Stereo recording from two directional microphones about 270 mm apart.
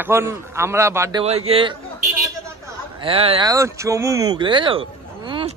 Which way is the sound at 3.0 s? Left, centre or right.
Right.